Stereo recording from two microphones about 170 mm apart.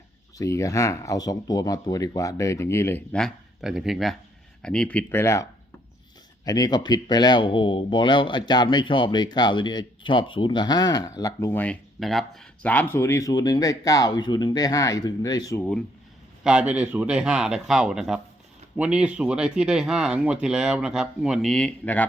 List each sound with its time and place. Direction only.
0.3 s speech: 20° left (ahead or behind)
16.4 s speech: 5° right (ahead or behind)